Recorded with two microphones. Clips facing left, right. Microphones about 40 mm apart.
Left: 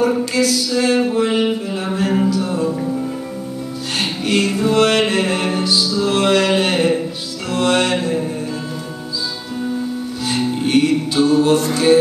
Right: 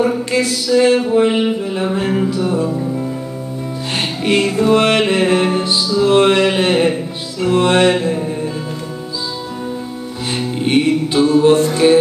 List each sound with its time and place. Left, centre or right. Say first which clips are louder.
0.0 s a sound: even; right
1.1 s music: right 3 dB; right
4.2 s music: right 3 dB; right
6.0 s a sound: right 4 dB; right
7.4 s music: right 5 dB; right
10.3 s music: right 1 dB; right